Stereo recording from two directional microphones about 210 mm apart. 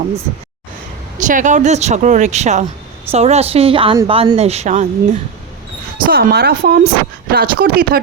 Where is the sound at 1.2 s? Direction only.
40° right (ahead or behind).